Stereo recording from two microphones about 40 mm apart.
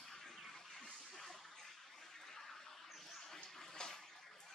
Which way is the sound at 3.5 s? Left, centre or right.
Centre.